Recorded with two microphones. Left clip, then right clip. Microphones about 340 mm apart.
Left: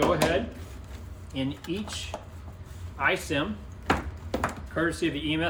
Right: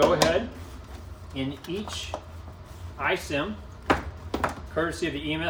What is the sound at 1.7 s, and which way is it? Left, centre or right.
Speech, right.